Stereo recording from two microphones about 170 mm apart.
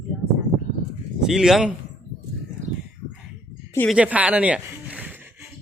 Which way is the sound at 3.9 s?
5° right (ahead or behind).